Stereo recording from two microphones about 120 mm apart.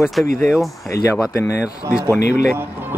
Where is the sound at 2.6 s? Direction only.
15° right (ahead or behind).